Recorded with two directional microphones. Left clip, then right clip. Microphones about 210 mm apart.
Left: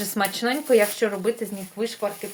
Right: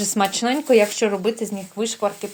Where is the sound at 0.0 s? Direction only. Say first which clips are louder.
Right 4 dB; 35° right (ahead or behind).